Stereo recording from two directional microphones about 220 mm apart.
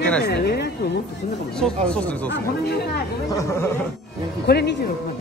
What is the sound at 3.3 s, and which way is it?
Speech, 15° left (ahead or behind).